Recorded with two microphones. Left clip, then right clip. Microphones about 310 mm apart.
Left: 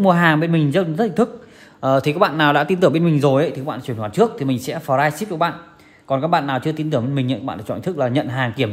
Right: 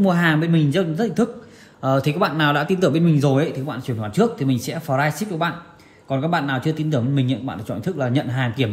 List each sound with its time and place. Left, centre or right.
0.0 s speech: left